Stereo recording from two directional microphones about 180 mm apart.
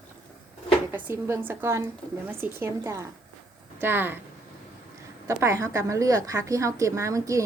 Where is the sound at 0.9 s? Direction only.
15° right (ahead or behind).